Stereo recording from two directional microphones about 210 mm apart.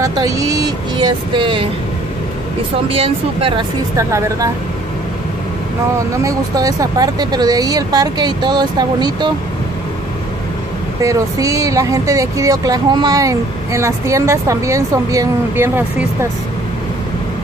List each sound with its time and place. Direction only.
0.0 s speech: 15° right (ahead or behind)
2.9 s speech: 25° right (ahead or behind)
3.9 s speech: 15° right (ahead or behind)
5.9 s speech: 15° right (ahead or behind)
11.0 s speech: 15° right (ahead or behind)